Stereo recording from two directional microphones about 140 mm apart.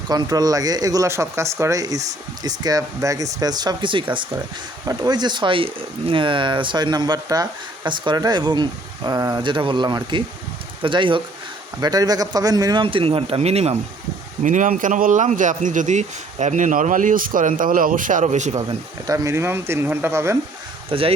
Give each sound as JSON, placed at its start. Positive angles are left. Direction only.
{"t": 0.1, "sound": "speech", "side_deg": -30}
{"t": 14.4, "sound": "speech", "side_deg": -65}
{"t": 19.0, "sound": "speech", "side_deg": -25}
{"t": 20.9, "sound": "speech", "side_deg": -40}